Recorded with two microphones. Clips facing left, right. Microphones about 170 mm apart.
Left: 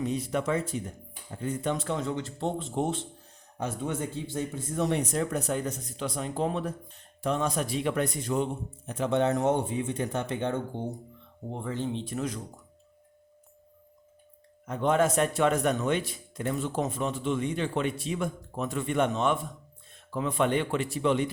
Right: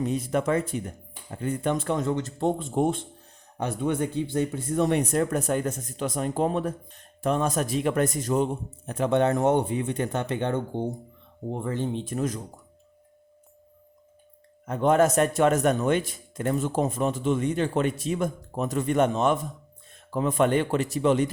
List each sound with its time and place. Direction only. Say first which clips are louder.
0.1 s speech: right 4 dB; 50° right (ahead or behind)
3.6 s speech: right 5 dB; 60° right (ahead or behind); by 8.4 s 40° right (ahead or behind)
8.9 s speech: right 3 dB; 55° right (ahead or behind)
11.6 s speech: right 2 dB; 50° right (ahead or behind)
14.7 s speech: right 4 dB; 45° right (ahead or behind)